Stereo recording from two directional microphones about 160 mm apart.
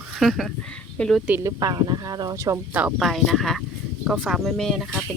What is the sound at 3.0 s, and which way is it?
Speech, centre (ahead or behind).